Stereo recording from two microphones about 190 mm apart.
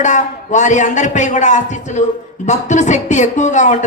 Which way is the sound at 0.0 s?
40° left (ahead or behind).